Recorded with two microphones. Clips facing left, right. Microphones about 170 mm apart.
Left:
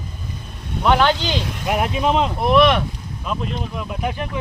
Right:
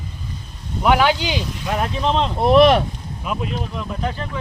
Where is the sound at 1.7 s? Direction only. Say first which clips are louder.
Left 2 dB; 15° left (ahead or behind).